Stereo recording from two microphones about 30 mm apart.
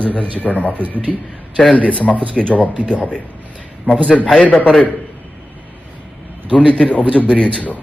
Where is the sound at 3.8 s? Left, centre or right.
Left.